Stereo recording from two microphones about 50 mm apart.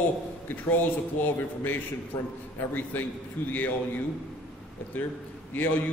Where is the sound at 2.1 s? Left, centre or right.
Left.